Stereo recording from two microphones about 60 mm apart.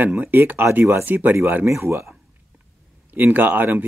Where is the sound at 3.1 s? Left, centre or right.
Right.